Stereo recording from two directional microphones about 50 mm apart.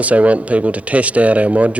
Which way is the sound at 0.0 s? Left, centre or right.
Right.